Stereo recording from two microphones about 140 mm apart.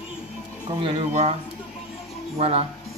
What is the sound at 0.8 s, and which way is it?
Speech, 50° right (ahead or behind).